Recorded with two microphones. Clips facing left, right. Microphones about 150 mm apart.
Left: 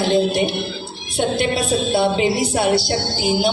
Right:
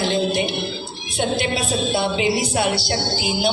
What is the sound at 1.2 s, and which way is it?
A woman's voice, 55° left (ahead or behind).